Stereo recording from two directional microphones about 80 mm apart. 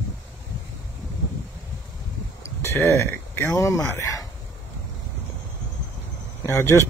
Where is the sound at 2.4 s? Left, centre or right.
Left.